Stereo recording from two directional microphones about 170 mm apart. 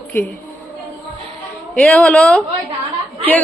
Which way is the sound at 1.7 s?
10° left (ahead or behind).